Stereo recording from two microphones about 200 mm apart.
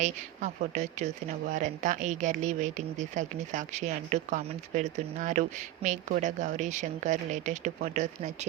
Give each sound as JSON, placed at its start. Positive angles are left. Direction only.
{"t": 0.0, "sound": "speech", "side_deg": -35}